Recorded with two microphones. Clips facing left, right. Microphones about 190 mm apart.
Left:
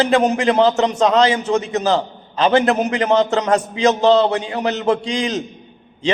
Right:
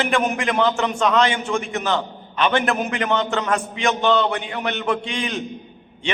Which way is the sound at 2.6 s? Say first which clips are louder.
Left 5 dB; 20° left (ahead or behind).